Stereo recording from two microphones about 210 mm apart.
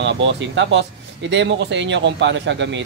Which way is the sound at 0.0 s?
55° right (ahead or behind).